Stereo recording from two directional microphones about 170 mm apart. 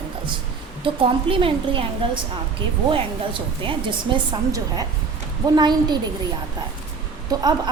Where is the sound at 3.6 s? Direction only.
30° right (ahead or behind).